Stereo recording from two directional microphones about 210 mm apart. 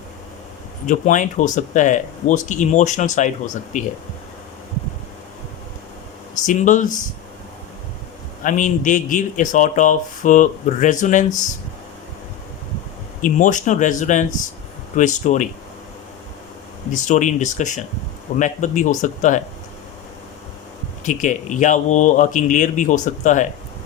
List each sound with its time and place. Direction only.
0.9 s speech: 35° left (ahead or behind)
6.4 s speech: 35° left (ahead or behind)
8.4 s speech: 35° left (ahead or behind)
13.2 s speech: 35° left (ahead or behind)
16.9 s speech: 35° left (ahead or behind)
21.0 s speech: 35° left (ahead or behind)